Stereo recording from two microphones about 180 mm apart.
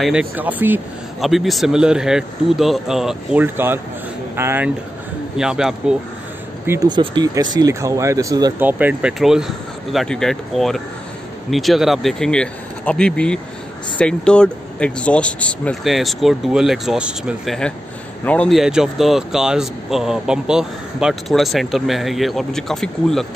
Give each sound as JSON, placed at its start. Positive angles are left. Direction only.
{"t": 0.0, "sound": "speech", "side_deg": -5}
{"t": 5.4, "sound": "speech", "side_deg": -5}
{"t": 6.9, "sound": "speech", "side_deg": -25}
{"t": 8.5, "sound": "speech", "side_deg": -10}
{"t": 18.2, "sound": "speech", "side_deg": 5}